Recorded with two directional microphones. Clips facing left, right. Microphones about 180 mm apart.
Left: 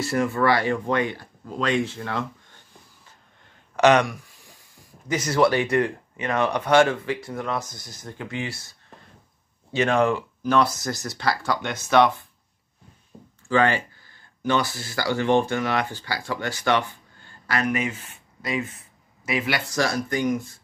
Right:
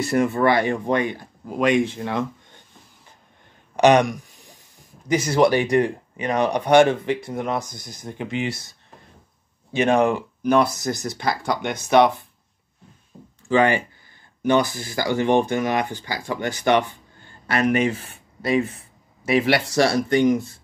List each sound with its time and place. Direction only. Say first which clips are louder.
0.0 s speech: right 3 dB; 20° right (ahead or behind)
3.7 s a sound: right 2 dB; 15° right (ahead or behind)
5.0 s speech: right 3 dB; 15° right (ahead or behind)
13.5 s speech: right 3 dB; 15° right (ahead or behind)
17.7 s speech: right 6 dB; 35° right (ahead or behind)